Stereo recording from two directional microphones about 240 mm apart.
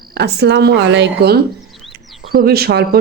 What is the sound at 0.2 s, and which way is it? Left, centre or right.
A woman's voice, right.